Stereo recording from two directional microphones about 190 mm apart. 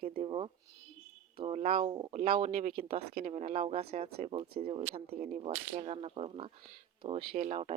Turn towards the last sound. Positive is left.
turn(degrees=-35)  # may be behind; listen again after turning